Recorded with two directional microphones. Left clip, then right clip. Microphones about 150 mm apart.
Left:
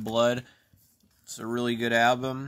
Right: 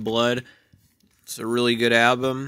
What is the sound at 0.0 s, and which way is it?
Speech, 10° right (ahead or behind).